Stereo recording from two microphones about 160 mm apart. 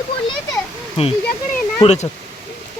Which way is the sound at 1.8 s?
45° left (ahead or behind).